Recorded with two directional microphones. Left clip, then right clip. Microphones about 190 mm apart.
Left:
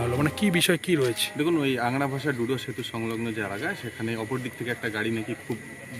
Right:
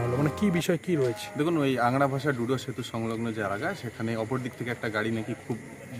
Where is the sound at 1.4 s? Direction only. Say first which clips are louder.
Right 1 dB; 15° right (ahead or behind).